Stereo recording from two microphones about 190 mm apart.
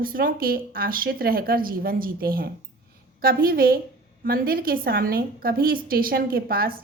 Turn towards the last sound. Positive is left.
turn(degrees=-50)  # may be behind; listen again after turning